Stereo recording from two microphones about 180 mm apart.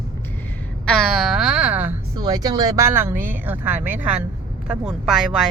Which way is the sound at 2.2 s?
20° right (ahead or behind).